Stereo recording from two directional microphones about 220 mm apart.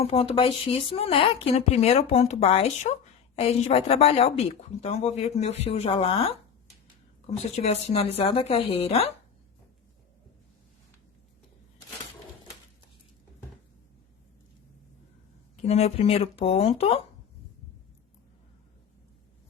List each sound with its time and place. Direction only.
0.0 s speech: 25° left (ahead or behind)
15.6 s speech: 30° left (ahead or behind)